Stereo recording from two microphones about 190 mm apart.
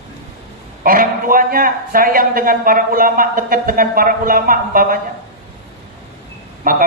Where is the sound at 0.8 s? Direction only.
50° right (ahead or behind).